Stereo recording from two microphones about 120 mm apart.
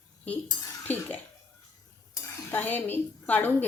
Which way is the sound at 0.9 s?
15° left (ahead or behind).